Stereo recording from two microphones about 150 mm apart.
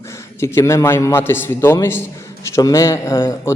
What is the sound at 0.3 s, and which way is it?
A man's voice, 20° left (ahead or behind).